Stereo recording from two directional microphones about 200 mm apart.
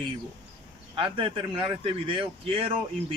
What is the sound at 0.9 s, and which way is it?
Speech, 25° right (ahead or behind).